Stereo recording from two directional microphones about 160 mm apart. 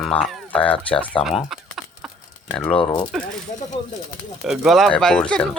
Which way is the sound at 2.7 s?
30° left (ahead or behind).